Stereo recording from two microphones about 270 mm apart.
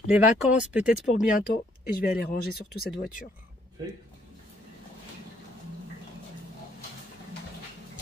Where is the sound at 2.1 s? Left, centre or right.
Left.